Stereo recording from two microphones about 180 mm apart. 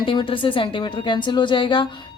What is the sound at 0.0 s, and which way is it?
A woman's voice, 30° left (ahead or behind).